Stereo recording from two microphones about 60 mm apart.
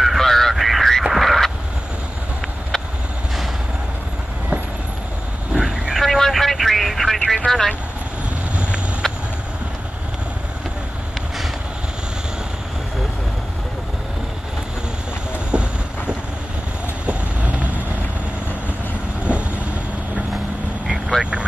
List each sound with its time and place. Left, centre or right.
0.0 s honk: centre
1.1 s frog: centre
5.5 s vehicle: centre
9.0 s vehicle: centre
15.5 s train: centre
17.0 s vehicle: right
19.2 s vehicle: right